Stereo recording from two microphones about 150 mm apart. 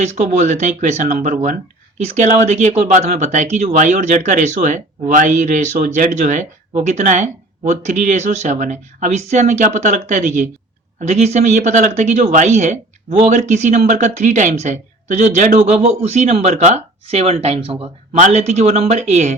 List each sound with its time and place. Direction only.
0.0 s speech: 55° right (ahead or behind)